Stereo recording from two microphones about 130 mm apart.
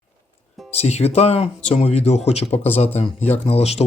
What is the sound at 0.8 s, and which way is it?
Speech, 55° left (ahead or behind).